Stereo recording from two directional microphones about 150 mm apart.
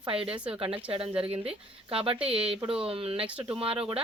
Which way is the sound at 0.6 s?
40° right (ahead or behind).